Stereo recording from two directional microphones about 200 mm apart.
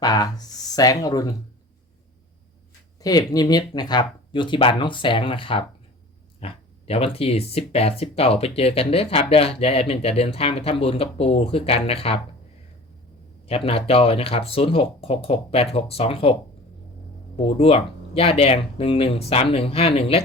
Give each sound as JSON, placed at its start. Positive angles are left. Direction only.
{"t": 0.0, "sound": "speech", "side_deg": 20}
{"t": 3.0, "sound": "speech", "side_deg": 20}
{"t": 13.4, "sound": "speech", "side_deg": 30}
{"t": 17.3, "sound": "speech", "side_deg": 30}